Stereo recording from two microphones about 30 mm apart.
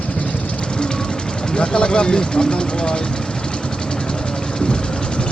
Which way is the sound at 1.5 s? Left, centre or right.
Left.